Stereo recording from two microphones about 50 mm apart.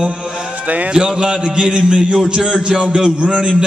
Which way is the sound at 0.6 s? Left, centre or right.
Right.